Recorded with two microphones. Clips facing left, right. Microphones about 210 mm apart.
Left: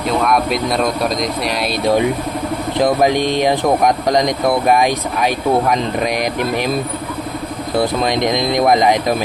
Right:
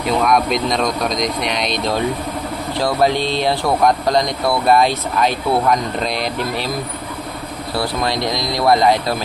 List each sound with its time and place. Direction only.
0.3 s speech: 5° left (ahead or behind)
7.7 s speech: 20° left (ahead or behind)